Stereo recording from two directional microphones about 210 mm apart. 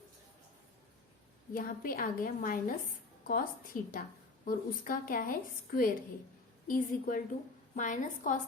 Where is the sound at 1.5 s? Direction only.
40° left (ahead or behind).